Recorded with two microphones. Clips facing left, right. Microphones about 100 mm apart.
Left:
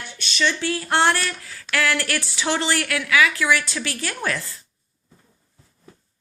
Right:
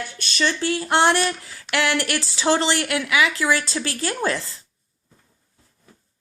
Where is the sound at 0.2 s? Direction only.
40° right (ahead or behind).